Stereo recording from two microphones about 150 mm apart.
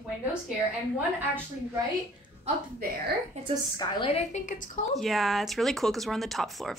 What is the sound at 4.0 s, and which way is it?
Speech, 45° left (ahead or behind).